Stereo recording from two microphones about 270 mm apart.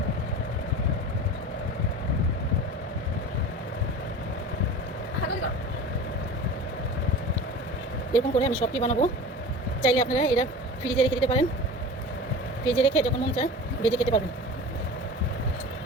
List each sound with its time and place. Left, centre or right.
8.1 s speech: left
12.6 s speech: centre